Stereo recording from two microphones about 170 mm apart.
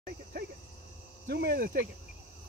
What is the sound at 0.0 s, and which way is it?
Cricket, 60° right (ahead or behind).